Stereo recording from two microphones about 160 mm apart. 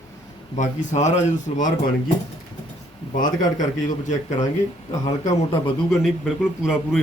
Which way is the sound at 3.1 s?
55° left (ahead or behind).